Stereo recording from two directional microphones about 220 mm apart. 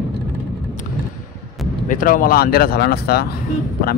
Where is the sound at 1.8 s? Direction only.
40° left (ahead or behind).